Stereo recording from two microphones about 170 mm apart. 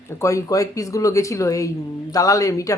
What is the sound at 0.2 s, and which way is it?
Speech, 20° left (ahead or behind).